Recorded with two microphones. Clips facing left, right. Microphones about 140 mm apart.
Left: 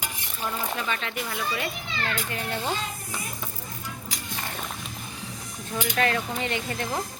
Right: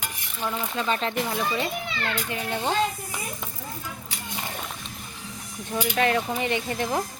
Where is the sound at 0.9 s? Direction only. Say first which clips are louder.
Right 5 dB; 35° right (ahead or behind).